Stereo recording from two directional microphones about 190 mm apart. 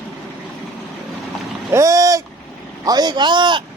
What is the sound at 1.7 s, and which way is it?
A man's voice, 15° right (ahead or behind).